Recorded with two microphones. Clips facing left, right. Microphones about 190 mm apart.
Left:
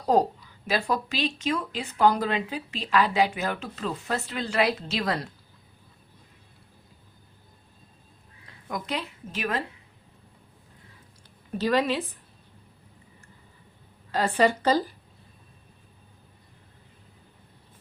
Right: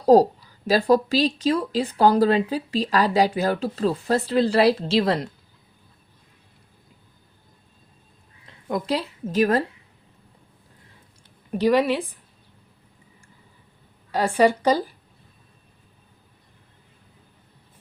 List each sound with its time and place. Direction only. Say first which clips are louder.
0.0 s speech: right 8 dB; 35° right (ahead or behind)
8.7 s speech: right 7 dB; 35° right (ahead or behind)
11.5 s speech: right 5 dB; 15° right (ahead or behind)
14.1 s speech: right 4 dB; 10° right (ahead or behind)